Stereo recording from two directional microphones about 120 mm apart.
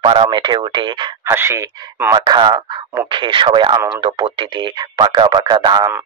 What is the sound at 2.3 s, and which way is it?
Speech, 35° right (ahead or behind).